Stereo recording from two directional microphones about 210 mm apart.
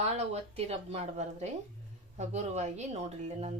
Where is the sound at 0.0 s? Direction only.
30° right (ahead or behind).